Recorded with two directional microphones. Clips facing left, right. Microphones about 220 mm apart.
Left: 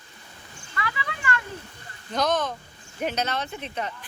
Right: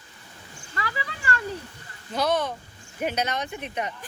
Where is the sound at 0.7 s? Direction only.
35° right (ahead or behind).